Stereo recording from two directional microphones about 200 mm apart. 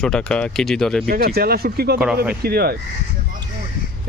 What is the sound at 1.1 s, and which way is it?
Speech, 50° right (ahead or behind).